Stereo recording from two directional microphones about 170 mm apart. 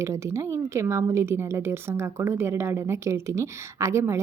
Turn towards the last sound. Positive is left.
turn(degrees=-15)  # may be behind; listen again after turning